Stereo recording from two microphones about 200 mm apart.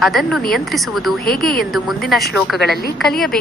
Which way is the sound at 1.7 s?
Centre (ahead or behind).